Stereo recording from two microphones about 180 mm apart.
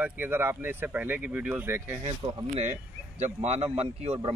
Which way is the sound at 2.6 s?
40° right (ahead or behind).